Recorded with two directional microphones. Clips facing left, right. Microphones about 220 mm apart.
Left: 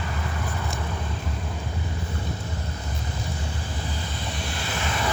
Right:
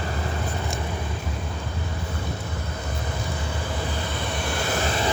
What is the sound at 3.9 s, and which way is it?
Vehicle, 60° right (ahead or behind).